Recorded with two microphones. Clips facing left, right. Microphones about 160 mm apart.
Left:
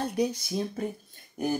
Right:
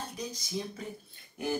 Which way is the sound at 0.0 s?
65° left (ahead or behind).